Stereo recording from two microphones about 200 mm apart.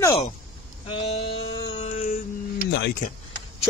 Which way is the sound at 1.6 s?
30° left (ahead or behind).